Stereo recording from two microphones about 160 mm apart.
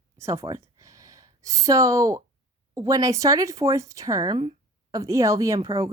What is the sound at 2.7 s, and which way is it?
Speech, 20° right (ahead or behind).